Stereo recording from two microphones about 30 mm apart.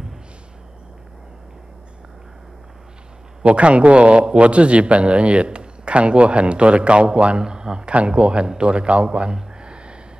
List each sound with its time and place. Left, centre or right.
3.4 s a man's voice: right